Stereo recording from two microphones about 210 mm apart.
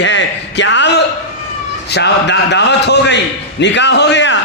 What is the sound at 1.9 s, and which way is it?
A man's voice, 55° left (ahead or behind).